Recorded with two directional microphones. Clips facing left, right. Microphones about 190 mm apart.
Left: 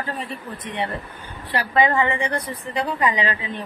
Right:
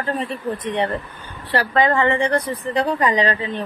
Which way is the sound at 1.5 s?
10° left (ahead or behind).